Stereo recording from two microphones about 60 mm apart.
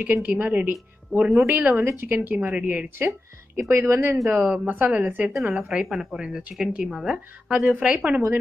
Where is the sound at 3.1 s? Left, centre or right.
Right.